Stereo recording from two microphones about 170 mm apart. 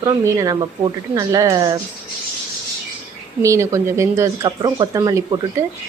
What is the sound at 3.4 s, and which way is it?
A woman's voice, 20° right (ahead or behind).